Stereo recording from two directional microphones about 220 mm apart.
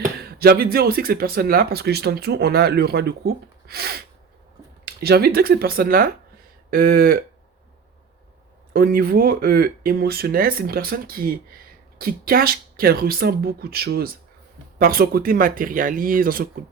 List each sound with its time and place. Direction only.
0.0 s speech: 45° right (ahead or behind)
8.7 s speech: 45° right (ahead or behind)